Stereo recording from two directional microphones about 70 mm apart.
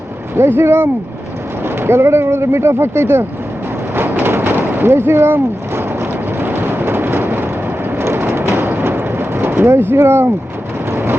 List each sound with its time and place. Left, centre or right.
0.3 s speech: right
3.9 s a sound: right
10.9 s vehicle: right